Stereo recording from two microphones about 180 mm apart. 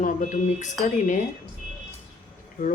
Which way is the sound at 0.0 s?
45° left (ahead or behind).